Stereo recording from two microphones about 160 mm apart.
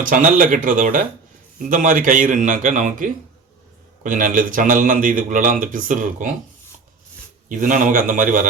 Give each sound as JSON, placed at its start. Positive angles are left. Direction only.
{"t": 0.0, "sound": "a man's voice", "side_deg": -55}
{"t": 7.4, "sound": "a man's voice", "side_deg": -55}